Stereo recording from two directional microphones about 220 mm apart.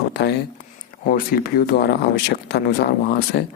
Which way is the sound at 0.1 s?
50° left (ahead or behind).